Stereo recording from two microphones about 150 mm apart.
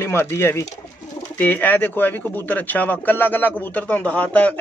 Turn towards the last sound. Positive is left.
turn(degrees=10)  # may be behind; listen again after turning